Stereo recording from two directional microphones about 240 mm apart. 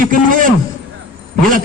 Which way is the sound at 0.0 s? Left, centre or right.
Right.